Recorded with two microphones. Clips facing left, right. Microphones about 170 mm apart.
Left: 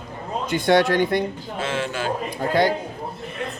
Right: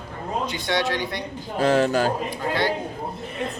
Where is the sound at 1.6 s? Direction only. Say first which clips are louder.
Right 7 dB; 40° right (ahead or behind).